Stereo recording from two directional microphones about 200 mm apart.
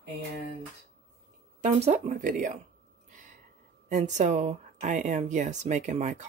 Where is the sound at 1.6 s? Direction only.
35° right (ahead or behind).